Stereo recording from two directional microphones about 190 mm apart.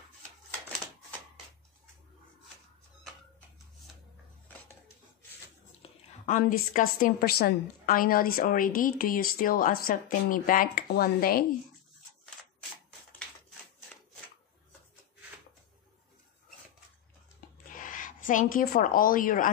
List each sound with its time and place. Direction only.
5.8 s a woman's voice: 45° left (ahead or behind)
17.7 s a woman's voice: 45° left (ahead or behind)